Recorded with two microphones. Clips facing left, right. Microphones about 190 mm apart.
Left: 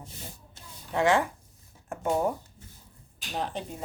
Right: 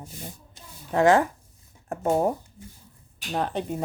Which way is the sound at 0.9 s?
45° right (ahead or behind).